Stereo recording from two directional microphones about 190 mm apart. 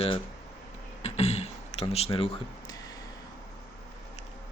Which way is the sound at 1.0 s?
35° left (ahead or behind).